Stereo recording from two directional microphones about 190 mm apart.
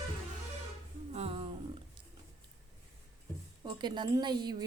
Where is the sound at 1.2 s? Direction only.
30° right (ahead or behind).